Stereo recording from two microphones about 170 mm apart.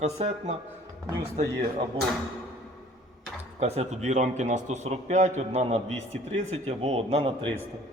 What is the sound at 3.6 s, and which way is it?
A man's voice, 40° right (ahead or behind).